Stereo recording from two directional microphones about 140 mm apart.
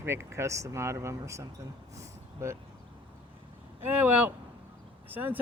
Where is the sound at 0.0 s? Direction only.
20° right (ahead or behind).